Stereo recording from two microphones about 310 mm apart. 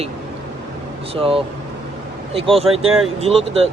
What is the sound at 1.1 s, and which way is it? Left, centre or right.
Speech, centre.